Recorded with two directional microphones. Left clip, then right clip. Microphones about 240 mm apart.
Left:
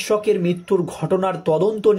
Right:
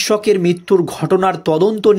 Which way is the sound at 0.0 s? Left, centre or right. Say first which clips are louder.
Right 5 dB; right.